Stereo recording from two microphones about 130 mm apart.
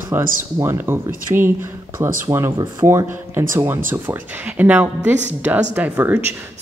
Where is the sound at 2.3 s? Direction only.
20° right (ahead or behind).